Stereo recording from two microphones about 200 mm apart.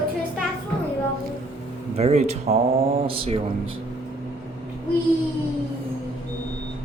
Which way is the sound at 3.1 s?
25° right (ahead or behind).